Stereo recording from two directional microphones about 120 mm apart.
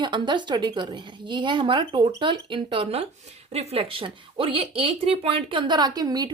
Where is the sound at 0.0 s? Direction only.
40° right (ahead or behind).